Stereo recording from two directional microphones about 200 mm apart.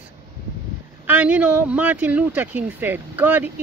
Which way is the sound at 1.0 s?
5° right (ahead or behind).